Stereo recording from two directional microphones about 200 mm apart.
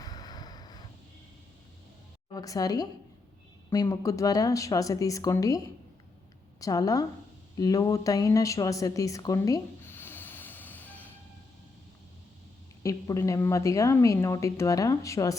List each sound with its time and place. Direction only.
0.0 s vehicle: 20° left (ahead or behind)
2.3 s a woman's voice: 20° left (ahead or behind)
6.6 s a woman's voice: 20° left (ahead or behind)
12.8 s a woman's voice: 15° left (ahead or behind)